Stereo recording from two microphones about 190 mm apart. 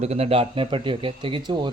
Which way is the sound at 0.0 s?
35° right (ahead or behind).